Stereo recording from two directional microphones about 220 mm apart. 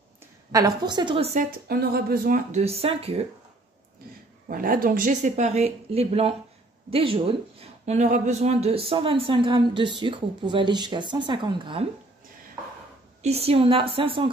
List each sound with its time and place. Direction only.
0.5 s speech: 15° right (ahead or behind)
1.7 s speech: 45° right (ahead or behind); by 3.3 s 25° right (ahead or behind)
4.5 s speech: 40° right (ahead or behind); by 11.8 s 20° right (ahead or behind)
13.2 s speech: 30° right (ahead or behind)